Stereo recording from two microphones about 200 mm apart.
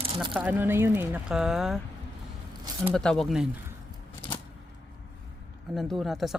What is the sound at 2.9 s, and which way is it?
Speech, 5° left (ahead or behind).